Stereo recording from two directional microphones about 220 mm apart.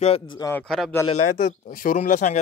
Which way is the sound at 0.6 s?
5° left (ahead or behind).